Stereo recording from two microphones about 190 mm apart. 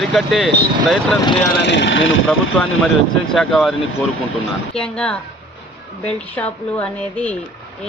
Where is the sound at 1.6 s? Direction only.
70° left (ahead or behind); by 2.2 s 90° left.